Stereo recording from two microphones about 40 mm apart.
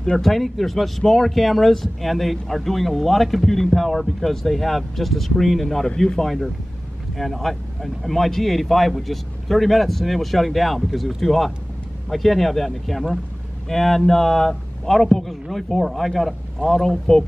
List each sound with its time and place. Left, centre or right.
0.0 s speech: centre
5.9 s speech: centre
6.2 s speech: centre